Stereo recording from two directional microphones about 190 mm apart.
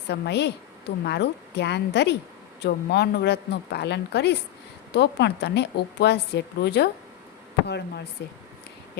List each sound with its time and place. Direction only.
0.1 s a woman's voice: 60° left (ahead or behind)